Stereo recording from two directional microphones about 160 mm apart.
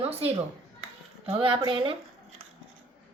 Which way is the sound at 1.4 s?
35° right (ahead or behind).